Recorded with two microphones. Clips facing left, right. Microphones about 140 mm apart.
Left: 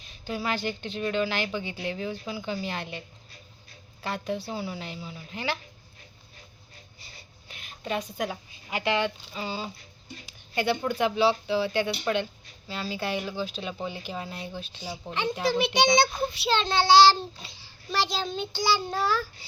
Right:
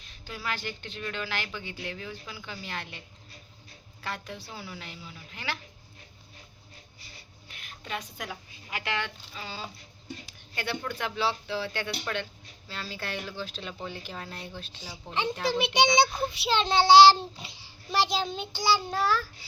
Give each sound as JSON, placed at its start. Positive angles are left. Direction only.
{"t": 0.1, "sound": "a woman's voice", "side_deg": 20}
{"t": 4.0, "sound": "a woman's voice", "side_deg": 20}
{"t": 7.4, "sound": "a woman's voice", "side_deg": 20}
{"t": 15.5, "sound": "a child's voice", "side_deg": -20}
{"t": 18.2, "sound": "child singing", "side_deg": -10}